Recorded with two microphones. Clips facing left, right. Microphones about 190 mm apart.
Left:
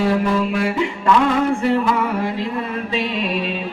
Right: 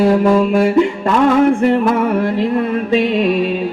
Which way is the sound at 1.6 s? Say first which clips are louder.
Right 5 dB; 55° right (ahead or behind).